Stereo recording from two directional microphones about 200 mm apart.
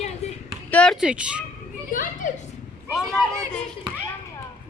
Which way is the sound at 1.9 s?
45° left (ahead or behind).